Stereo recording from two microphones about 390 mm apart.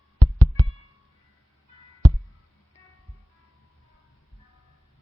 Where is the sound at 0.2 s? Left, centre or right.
Right.